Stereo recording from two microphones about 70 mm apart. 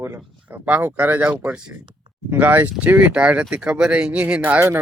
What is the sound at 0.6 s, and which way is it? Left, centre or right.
Speech, right.